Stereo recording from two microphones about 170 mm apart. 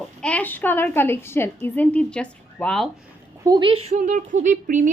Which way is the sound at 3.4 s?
25° right (ahead or behind).